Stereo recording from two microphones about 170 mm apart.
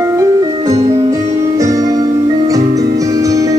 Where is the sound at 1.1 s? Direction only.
20° right (ahead or behind).